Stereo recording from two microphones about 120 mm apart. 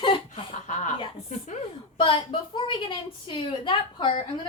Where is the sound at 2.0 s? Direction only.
45° left (ahead or behind).